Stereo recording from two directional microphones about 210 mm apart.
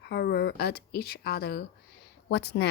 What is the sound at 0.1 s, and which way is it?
A woman's voice, 50° left (ahead or behind).